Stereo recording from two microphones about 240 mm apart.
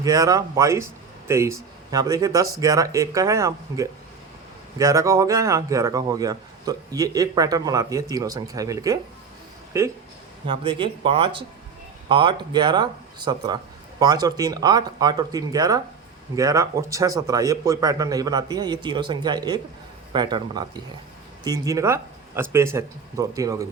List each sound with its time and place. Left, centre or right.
0.0 s speech: centre
10.4 s speech: right